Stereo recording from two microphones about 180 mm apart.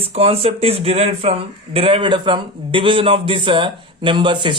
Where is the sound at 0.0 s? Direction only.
35° right (ahead or behind).